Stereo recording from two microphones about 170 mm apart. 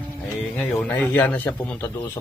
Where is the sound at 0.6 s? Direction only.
10° left (ahead or behind).